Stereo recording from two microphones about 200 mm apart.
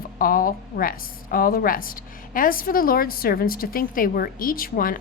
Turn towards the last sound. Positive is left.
turn(degrees=45)  # may be behind; listen again after turning